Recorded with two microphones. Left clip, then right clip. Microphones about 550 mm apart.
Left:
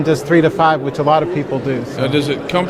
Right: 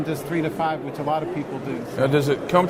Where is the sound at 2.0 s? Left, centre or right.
Right.